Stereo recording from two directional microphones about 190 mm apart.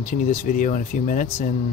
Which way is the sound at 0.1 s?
40° left (ahead or behind).